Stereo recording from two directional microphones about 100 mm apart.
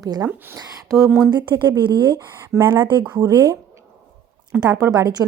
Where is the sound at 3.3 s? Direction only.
25° right (ahead or behind).